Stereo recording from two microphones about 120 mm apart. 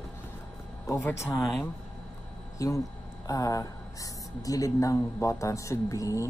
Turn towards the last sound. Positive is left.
turn(degrees=25)  # may be behind; listen again after turning